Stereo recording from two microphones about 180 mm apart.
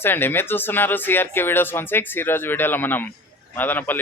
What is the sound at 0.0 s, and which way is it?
Speech, 10° left (ahead or behind).